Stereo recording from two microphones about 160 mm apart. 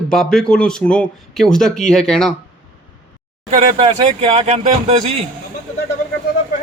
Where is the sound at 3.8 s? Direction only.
35° right (ahead or behind).